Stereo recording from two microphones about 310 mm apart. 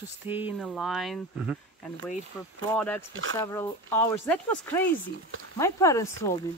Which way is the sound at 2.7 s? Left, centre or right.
Centre.